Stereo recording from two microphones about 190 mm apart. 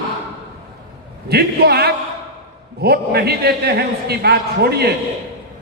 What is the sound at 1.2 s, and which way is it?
A man's voice, 55° right (ahead or behind).